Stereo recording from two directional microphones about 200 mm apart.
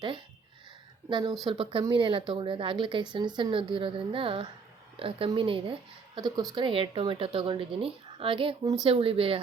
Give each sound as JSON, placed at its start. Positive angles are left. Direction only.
{"t": 1.1, "sound": "speech", "side_deg": -20}